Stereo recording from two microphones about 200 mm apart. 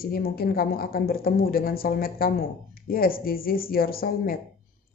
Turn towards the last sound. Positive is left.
turn(degrees=50)  # may be behind; listen again after turning